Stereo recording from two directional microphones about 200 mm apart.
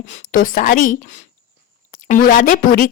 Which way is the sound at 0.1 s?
45° left (ahead or behind).